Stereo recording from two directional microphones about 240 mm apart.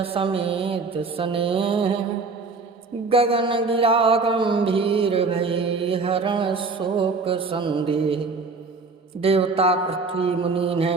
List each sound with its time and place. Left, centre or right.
0.0 s mantra: right
3.1 s mantra: right
9.2 s mantra: right